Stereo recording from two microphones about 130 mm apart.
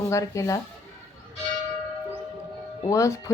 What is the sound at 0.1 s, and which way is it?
Speech, 25° left (ahead or behind).